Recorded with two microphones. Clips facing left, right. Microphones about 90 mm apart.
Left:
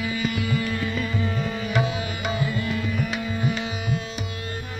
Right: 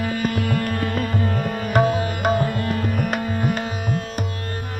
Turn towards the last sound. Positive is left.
turn(degrees=-50)  # may be behind; listen again after turning